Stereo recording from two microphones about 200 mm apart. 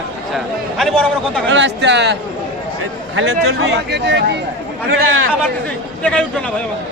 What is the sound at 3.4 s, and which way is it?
Speech, 60° right (ahead or behind).